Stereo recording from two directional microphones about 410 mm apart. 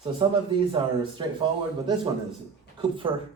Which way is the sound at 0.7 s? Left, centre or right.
Centre.